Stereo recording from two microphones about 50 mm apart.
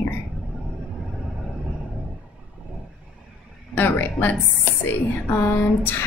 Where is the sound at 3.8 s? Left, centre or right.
Left.